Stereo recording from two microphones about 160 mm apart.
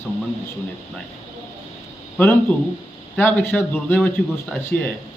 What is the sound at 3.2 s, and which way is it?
Speech, 15° left (ahead or behind).